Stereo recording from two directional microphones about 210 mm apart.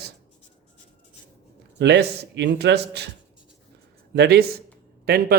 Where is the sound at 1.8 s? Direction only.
55° right (ahead or behind).